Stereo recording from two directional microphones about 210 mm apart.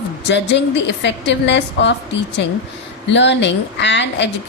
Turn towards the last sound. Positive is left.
turn(degrees=55)  # may be behind; listen again after turning